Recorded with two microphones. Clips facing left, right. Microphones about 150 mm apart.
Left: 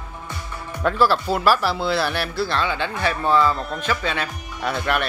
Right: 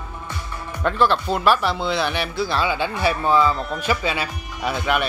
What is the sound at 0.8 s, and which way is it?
Speech, 5° left (ahead or behind).